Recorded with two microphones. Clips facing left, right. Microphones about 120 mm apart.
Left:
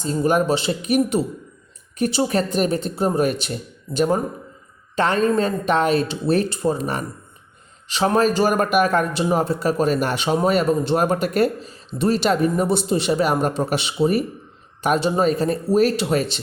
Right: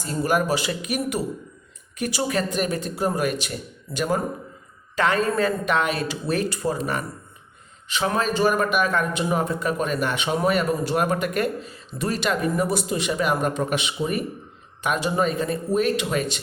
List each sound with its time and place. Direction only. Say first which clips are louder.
0.0 s a man's voice: left 4 dB; 25° left (ahead or behind)